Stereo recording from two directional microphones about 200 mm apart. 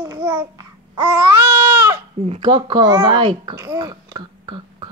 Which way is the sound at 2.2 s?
25° right (ahead or behind).